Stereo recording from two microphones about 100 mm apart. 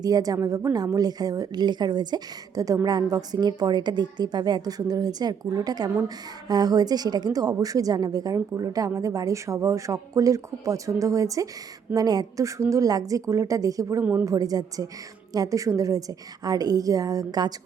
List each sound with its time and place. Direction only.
0.0 s a woman's voice: 40° right (ahead or behind)
14.0 s a woman's voice: 15° right (ahead or behind)
14.3 s a woman's voice: 40° right (ahead or behind)